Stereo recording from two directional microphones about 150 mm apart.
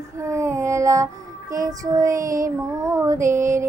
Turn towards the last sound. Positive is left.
turn(degrees=-20)  # may be behind; listen again after turning